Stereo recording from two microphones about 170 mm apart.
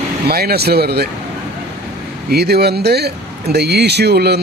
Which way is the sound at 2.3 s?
70° right (ahead or behind).